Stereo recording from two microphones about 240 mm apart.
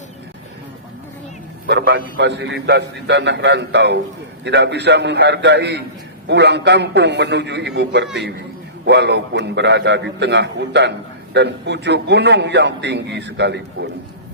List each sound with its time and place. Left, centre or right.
1.6 s a man's voice: right